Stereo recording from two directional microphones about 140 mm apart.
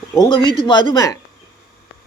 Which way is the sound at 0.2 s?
35° left (ahead or behind).